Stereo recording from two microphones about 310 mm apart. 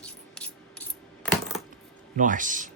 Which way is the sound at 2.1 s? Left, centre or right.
Right.